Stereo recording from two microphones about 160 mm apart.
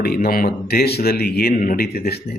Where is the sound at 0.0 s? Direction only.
75° left (ahead or behind).